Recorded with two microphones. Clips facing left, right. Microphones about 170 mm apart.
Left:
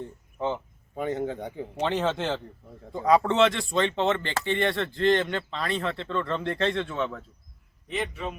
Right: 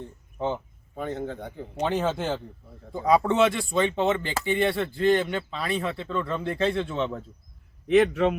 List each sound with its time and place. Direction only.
0.5 s speech: 10° left (ahead or behind)
1.8 s speech: 10° right (ahead or behind)
7.9 s a man's voice: 80° right